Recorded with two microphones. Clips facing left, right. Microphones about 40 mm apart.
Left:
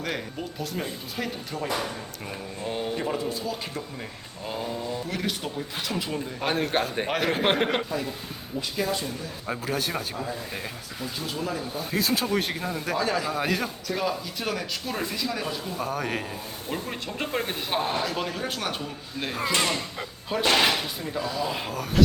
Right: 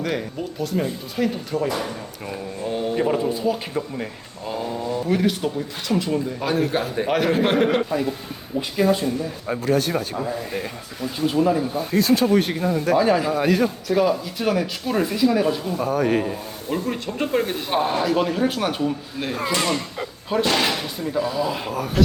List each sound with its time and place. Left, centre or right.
0.0 s speech: centre
2.9 s speech: centre
4.4 s speech: centre
6.4 s a man's voice: left
7.1 s speech: centre
7.9 s speech: centre
9.5 s speech: centre
10.2 s speech: centre
11.3 s speech: centre
11.8 s speech: centre
13.0 s speech: centre
13.3 s speech: centre
20.5 s speech: centre
20.8 s speech: centre